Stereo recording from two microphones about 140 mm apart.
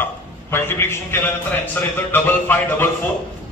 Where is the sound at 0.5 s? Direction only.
15° left (ahead or behind).